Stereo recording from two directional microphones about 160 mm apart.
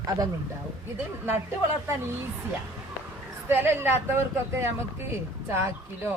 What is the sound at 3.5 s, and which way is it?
Speech, 15° right (ahead or behind).